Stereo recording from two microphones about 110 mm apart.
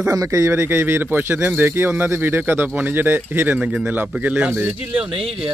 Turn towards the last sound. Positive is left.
turn(degrees=-50)  # may be behind; listen again after turning